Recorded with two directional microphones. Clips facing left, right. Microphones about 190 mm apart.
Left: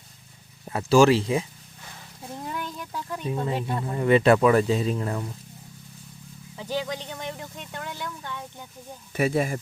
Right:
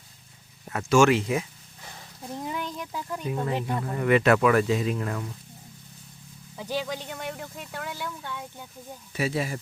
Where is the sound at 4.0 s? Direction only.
30° left (ahead or behind).